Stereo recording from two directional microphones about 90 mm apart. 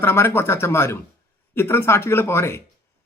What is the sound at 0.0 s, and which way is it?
Speech, 25° left (ahead or behind).